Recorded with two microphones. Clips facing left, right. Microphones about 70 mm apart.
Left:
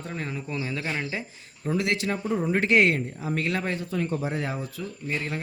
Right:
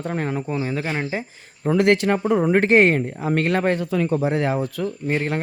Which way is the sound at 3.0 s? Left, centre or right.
Right.